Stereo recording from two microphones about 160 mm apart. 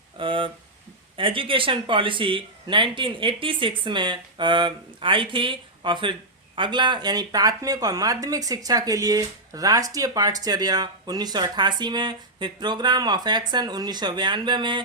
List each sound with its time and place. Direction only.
0.2 s speech: 35° right (ahead or behind)